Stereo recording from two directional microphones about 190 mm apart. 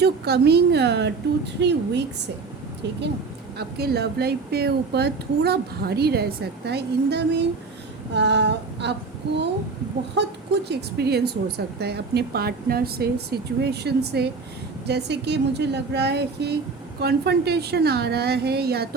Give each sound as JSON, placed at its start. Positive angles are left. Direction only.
{"t": 0.0, "sound": "speech", "side_deg": -60}
{"t": 3.6, "sound": "speech", "side_deg": -55}